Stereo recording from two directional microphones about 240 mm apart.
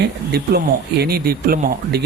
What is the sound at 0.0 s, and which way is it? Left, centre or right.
Speech, right.